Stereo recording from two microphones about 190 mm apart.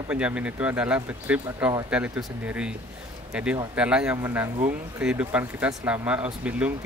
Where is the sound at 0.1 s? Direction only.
5° right (ahead or behind).